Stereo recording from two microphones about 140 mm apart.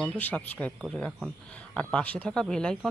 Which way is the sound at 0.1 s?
10° left (ahead or behind).